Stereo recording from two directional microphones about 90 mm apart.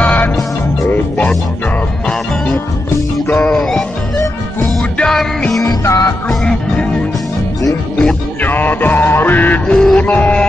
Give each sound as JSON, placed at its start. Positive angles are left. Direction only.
{"t": 0.0, "sound": "music", "side_deg": 20}
{"t": 3.3, "sound": "music", "side_deg": 5}
{"t": 4.9, "sound": "music", "side_deg": 10}
{"t": 5.6, "sound": "music", "side_deg": 45}
{"t": 6.2, "sound": "music", "side_deg": 10}
{"t": 8.4, "sound": "music", "side_deg": 20}